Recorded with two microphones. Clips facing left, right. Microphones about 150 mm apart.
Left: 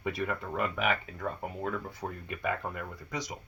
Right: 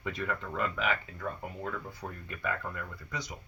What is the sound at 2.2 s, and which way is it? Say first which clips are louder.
Speech: left 2 dB; 20° left (ahead or behind).